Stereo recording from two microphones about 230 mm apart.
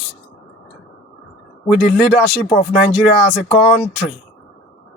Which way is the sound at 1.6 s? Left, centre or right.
Centre.